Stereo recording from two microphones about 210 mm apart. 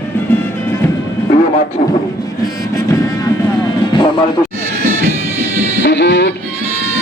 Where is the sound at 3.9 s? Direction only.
25° left (ahead or behind).